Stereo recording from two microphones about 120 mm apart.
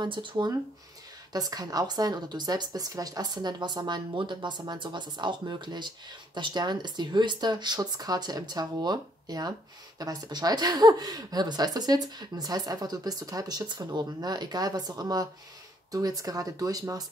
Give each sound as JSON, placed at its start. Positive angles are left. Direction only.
{"t": 0.0, "sound": "speech", "side_deg": -45}
{"t": 1.3, "sound": "speech", "side_deg": -30}